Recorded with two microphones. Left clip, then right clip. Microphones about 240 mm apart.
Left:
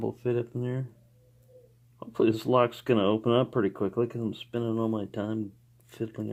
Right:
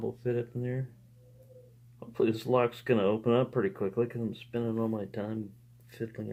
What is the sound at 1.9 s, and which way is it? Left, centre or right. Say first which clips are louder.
Speech: left 4 dB; left.